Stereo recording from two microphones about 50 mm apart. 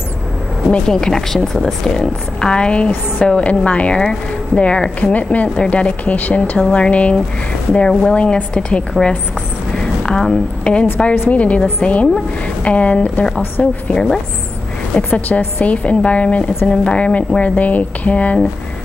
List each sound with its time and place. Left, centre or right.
0.7 s speech: centre
15.1 s speech: left